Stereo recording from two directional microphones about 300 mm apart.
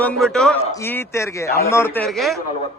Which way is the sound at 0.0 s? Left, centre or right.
Centre.